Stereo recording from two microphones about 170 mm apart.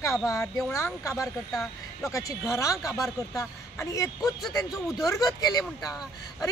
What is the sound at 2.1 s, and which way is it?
Speech, 20° left (ahead or behind).